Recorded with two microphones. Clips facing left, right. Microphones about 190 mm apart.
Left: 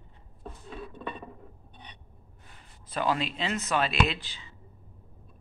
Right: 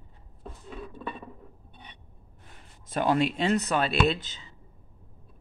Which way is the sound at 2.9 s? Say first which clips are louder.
Right 4 dB; 50° right (ahead or behind).